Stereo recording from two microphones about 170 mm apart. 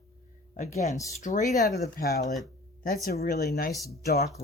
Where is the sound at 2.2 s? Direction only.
45° left (ahead or behind).